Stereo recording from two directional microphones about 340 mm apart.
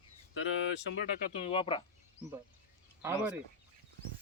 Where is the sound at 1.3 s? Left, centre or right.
Centre.